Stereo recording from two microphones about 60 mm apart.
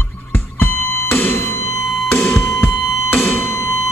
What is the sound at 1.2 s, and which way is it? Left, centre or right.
Music, left.